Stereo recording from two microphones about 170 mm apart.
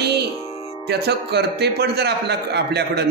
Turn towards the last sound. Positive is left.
turn(degrees=-75)  # may be behind; listen again after turning